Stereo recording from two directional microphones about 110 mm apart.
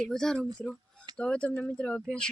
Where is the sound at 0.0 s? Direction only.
5° left (ahead or behind).